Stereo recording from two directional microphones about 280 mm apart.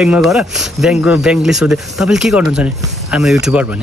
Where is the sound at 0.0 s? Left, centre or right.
Centre.